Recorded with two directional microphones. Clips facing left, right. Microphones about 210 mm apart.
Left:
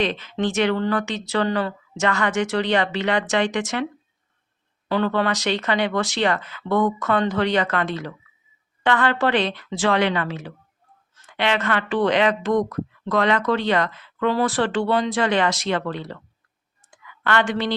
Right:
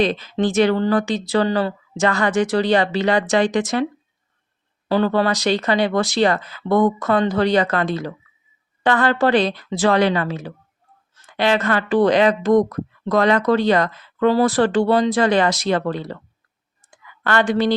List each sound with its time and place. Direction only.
0.0 s speech: 35° right (ahead or behind)
4.9 s speech: 35° right (ahead or behind)
17.2 s speech: 40° right (ahead or behind)